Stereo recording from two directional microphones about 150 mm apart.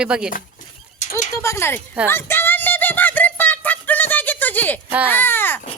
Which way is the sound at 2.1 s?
15° left (ahead or behind).